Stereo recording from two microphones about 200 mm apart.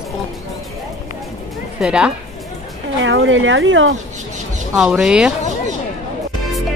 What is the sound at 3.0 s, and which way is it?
Speech, 70° right (ahead or behind).